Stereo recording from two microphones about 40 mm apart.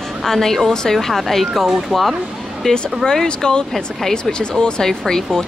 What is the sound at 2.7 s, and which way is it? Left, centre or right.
Speech, centre.